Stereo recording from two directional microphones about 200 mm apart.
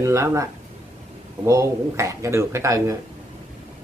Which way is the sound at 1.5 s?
15° right (ahead or behind).